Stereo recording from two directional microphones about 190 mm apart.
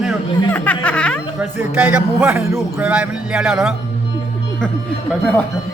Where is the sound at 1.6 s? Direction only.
10° right (ahead or behind).